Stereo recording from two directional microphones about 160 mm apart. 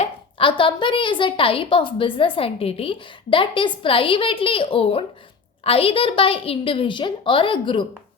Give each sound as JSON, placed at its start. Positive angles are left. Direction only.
{"t": 0.0, "sound": "a woman's voice", "side_deg": 35}